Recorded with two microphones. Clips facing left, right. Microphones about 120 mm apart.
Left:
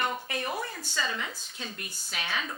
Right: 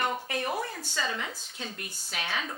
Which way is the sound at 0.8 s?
70° right (ahead or behind).